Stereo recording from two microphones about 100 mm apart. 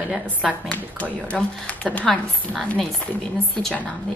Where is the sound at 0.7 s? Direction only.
15° left (ahead or behind).